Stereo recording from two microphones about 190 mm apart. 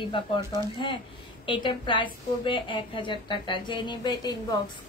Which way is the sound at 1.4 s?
25° left (ahead or behind).